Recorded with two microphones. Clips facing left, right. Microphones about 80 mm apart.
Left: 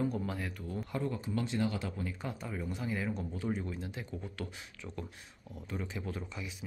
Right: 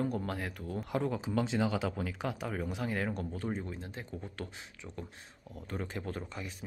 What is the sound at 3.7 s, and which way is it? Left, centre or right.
Speech, right.